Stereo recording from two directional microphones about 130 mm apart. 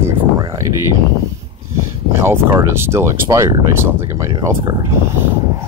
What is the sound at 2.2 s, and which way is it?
Speech, 20° right (ahead or behind).